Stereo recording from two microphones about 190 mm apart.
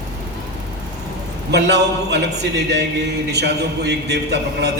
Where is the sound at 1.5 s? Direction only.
60° right (ahead or behind).